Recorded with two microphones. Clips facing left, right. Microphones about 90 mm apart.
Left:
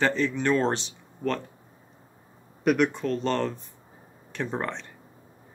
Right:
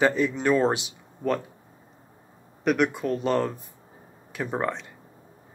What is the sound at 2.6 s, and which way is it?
Speech, centre (ahead or behind).